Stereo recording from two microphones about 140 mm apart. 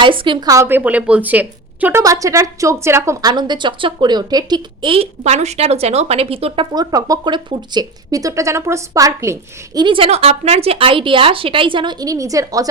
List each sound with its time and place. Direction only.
0.0 s a woman's voice: 35° right (ahead or behind); by 2.0 s 10° right (ahead or behind)
2.0 s a woman's voice: 25° right (ahead or behind); by 6.7 s 45° right (ahead or behind)
6.7 s speech: 30° right (ahead or behind)
9.8 s a woman's voice: 40° right (ahead or behind); by 12.6 s 25° right (ahead or behind)